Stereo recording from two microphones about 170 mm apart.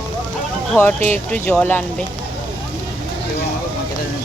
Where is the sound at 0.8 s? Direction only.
10° left (ahead or behind).